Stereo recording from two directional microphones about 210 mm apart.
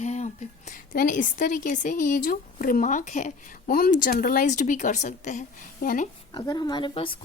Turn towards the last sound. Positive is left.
turn(degrees=25)  # may be behind; listen again after turning